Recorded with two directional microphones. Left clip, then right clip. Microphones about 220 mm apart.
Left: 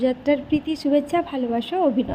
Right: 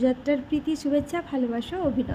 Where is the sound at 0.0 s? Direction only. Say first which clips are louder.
Left 3 dB; 5° left (ahead or behind).